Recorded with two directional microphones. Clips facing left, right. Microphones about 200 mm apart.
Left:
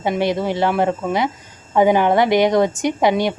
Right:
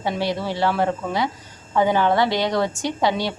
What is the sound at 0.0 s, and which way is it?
A woman's voice, 20° left (ahead or behind).